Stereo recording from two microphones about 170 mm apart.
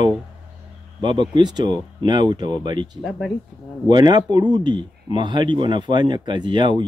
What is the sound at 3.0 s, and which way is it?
Speech, centre (ahead or behind).